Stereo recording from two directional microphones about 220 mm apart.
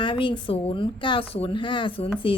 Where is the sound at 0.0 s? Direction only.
20° left (ahead or behind).